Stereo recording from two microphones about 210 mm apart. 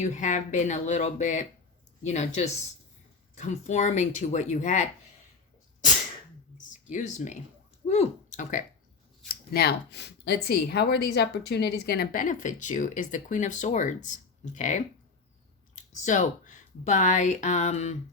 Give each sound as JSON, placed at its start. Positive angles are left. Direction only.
{"t": 0.0, "sound": "speech", "side_deg": 35}
{"t": 6.6, "sound": "a sound", "side_deg": 35}
{"t": 7.9, "sound": "speech", "side_deg": 35}
{"t": 9.3, "sound": "speech", "side_deg": 45}